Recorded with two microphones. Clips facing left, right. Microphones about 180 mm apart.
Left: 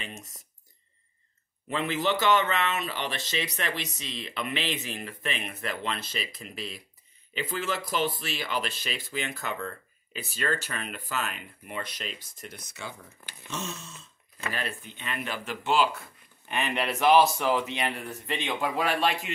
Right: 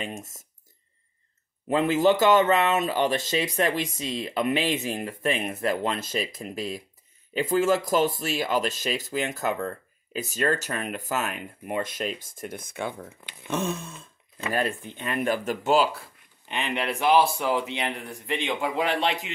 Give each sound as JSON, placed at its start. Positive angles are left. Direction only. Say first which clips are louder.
{"t": 0.0, "sound": "speech", "louder": "right 7 dB", "side_deg": -45}
{"t": 1.7, "sound": "speech", "louder": "right 7 dB", "side_deg": -45}
{"t": 13.5, "sound": "a sound", "louder": "right 9 dB", "side_deg": -55}
{"t": 14.5, "sound": "speech", "louder": "right 9 dB", "side_deg": -45}
{"t": 16.4, "sound": "a man's voice", "louder": "right 1 dB", "side_deg": -20}